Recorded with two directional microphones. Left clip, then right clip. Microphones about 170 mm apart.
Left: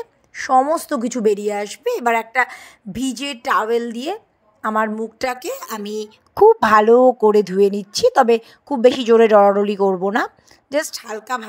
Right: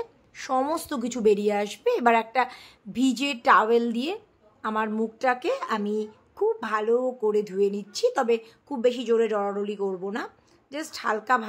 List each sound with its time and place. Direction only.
0.0 s a woman's voice: 35° left (ahead or behind)
5.4 s a woman's voice: centre (ahead or behind)
5.9 s speech: 55° left (ahead or behind)